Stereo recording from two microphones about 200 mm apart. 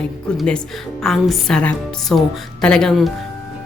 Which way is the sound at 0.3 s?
5° left (ahead or behind).